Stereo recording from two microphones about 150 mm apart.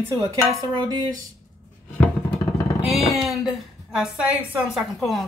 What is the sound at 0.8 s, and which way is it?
Speech, 25° right (ahead or behind).